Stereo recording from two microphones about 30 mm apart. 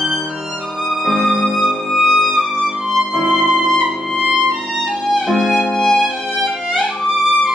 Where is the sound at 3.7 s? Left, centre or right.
Right.